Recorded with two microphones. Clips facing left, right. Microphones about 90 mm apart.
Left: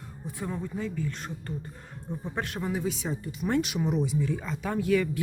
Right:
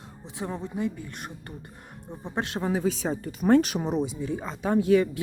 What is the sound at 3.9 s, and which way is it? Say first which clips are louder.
Speech: even; 20° right (ahead or behind).